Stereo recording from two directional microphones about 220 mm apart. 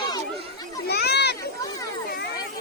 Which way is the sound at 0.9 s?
50° left (ahead or behind).